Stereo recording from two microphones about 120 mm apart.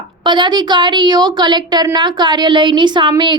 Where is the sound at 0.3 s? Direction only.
40° right (ahead or behind).